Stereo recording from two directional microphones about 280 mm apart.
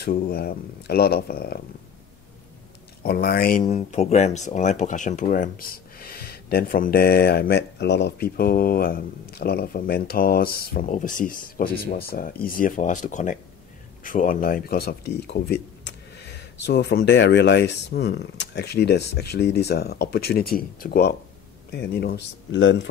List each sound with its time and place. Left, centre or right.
0.0 s speech: left
3.0 s speech: left